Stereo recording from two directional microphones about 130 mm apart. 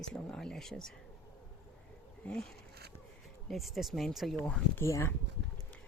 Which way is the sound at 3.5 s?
Centre (ahead or behind).